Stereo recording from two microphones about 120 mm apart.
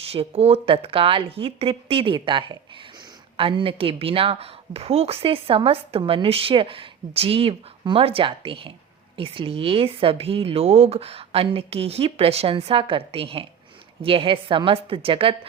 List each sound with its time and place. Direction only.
0.0 s a woman's voice: 55° right (ahead or behind)